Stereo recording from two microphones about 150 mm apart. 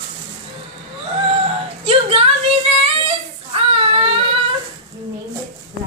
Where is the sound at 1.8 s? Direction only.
40° right (ahead or behind).